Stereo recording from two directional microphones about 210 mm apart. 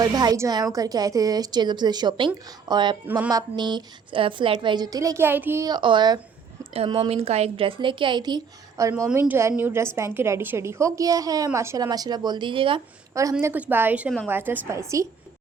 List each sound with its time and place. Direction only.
0.0 s a woman's voice: 20° right (ahead or behind)